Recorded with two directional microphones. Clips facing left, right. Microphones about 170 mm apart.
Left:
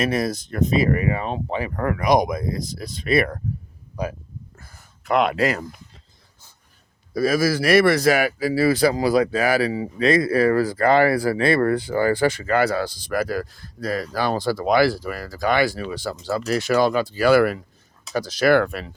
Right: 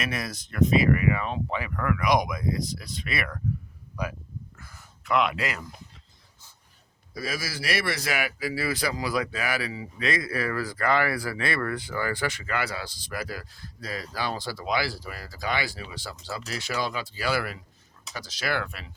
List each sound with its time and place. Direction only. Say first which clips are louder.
0.0 s speech: left 10 dB; 40° left (ahead or behind)
4.5 s a sound: left 1 dB; 35° left (ahead or behind)
7.1 s speech: left 14 dB; 45° left (ahead or behind)
12.6 s speech: left 12 dB; 50° left (ahead or behind)